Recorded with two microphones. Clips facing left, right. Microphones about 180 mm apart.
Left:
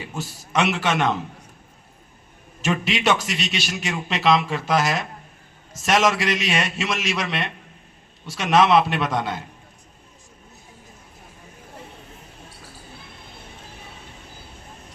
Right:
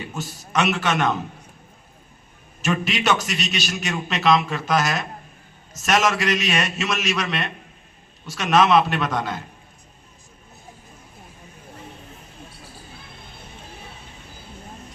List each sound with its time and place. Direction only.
0.1 s a man's voice: 30° left (ahead or behind)
2.6 s a man's voice: 25° left (ahead or behind)